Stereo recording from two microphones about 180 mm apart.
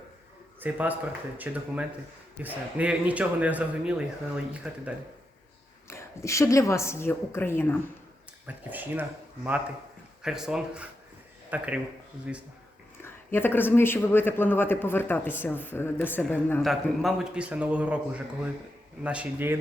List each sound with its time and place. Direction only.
0.6 s a man's voice: 10° right (ahead or behind)
5.9 s speech: 15° left (ahead or behind)
8.4 s a man's voice: 10° right (ahead or behind)
13.0 s speech: 10° left (ahead or behind)
16.6 s a man's voice: centre (ahead or behind)